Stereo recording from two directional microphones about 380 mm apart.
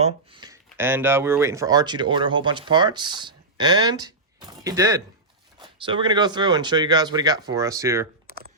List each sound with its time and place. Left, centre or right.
0.0 s speech: centre
8.3 s computer keyboard: right